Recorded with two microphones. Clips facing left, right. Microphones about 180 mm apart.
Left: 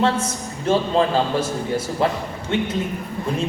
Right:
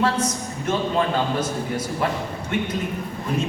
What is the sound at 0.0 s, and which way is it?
A woman's voice, 25° left (ahead or behind).